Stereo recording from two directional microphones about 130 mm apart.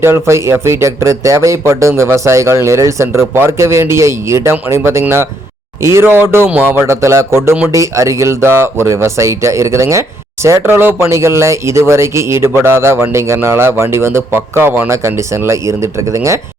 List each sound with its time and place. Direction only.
0.0 s a man's voice: 20° right (ahead or behind)